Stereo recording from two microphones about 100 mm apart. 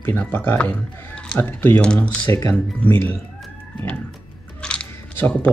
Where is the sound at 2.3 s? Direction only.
30° left (ahead or behind).